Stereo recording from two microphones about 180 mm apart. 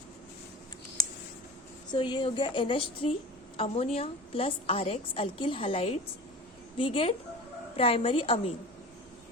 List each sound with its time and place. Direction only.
1.9 s a woman's voice: 25° left (ahead or behind)